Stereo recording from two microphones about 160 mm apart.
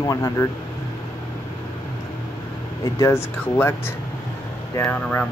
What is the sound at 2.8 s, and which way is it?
Speech, 20° left (ahead or behind).